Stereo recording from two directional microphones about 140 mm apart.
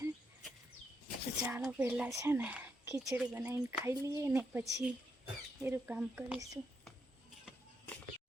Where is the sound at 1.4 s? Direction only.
10° right (ahead or behind).